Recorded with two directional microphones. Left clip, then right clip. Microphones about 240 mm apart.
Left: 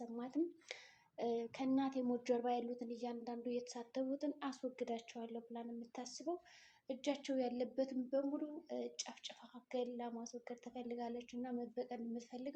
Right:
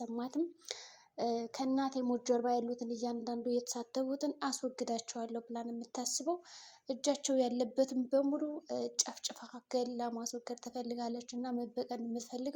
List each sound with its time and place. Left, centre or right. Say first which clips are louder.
0.0 s speech: right 4 dB; right
1.8 s a woman's voice: right 5 dB; right